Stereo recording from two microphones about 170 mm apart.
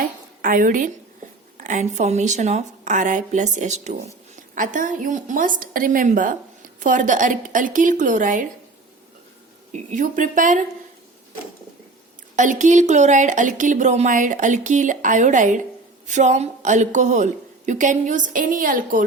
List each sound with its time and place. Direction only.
0.4 s a woman's voice: 55° right (ahead or behind)
9.9 s a woman's voice: 50° right (ahead or behind)
12.4 s a woman's voice: 45° right (ahead or behind)